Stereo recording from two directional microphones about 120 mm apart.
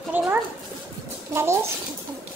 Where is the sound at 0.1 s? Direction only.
15° right (ahead or behind).